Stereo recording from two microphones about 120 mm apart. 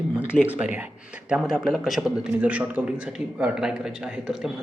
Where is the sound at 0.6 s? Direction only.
10° right (ahead or behind).